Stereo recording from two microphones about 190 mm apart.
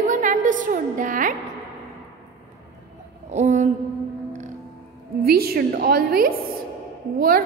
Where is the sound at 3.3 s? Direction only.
40° right (ahead or behind).